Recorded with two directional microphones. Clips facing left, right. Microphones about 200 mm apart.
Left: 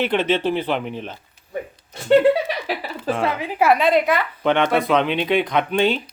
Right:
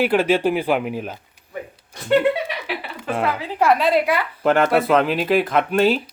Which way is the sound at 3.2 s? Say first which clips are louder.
Even; 15° left (ahead or behind).